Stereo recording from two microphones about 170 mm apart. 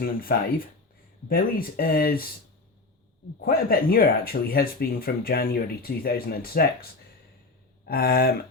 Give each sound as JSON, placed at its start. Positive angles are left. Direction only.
{"t": 0.0, "sound": "speech", "side_deg": 60}
{"t": 3.4, "sound": "speech", "side_deg": 60}
{"t": 7.9, "sound": "speech", "side_deg": 60}